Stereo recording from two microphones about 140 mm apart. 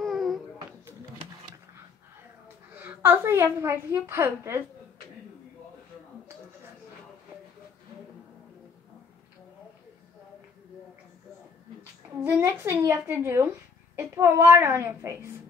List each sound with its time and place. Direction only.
0.0 s a sound: centre (ahead or behind)
2.4 s a woman's voice: 15° right (ahead or behind)
12.2 s speech: 15° right (ahead or behind)